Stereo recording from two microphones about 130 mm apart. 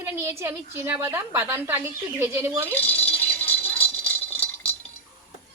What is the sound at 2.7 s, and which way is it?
Speech, 15° left (ahead or behind).